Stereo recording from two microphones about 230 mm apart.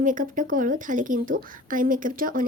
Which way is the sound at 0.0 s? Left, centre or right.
Right.